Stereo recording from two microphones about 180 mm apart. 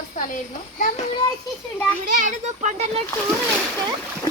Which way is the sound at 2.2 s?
40° right (ahead or behind).